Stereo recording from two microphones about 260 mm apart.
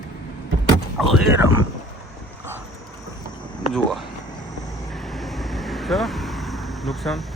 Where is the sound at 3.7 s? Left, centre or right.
Centre.